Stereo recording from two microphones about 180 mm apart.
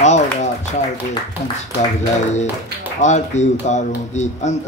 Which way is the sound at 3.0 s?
40° left (ahead or behind).